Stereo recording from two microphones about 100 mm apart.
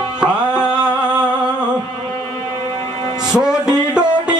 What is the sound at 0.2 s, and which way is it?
Music, 10° right (ahead or behind).